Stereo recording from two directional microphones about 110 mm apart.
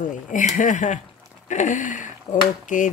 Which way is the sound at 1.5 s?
90° left.